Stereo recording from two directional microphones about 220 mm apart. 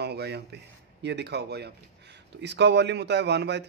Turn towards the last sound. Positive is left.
turn(degrees=-50)  # may be behind; listen again after turning